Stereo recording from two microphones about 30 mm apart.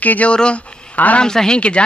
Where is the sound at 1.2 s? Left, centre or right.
Left.